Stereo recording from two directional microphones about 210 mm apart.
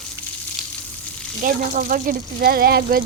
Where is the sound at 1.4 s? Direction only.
40° right (ahead or behind).